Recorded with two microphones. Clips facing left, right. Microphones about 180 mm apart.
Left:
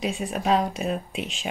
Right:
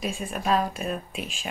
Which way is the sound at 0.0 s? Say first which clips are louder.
Left 3 dB; 75° left (ahead or behind).